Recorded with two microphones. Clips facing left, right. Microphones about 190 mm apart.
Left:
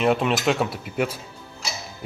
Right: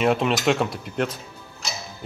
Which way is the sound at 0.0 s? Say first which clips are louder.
Even; centre (ahead or behind).